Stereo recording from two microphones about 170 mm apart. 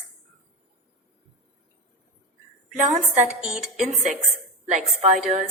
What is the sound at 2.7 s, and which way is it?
Speech, 45° right (ahead or behind).